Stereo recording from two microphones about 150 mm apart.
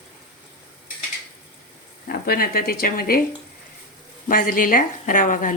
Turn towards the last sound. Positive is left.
turn(degrees=60)  # may be behind; listen again after turning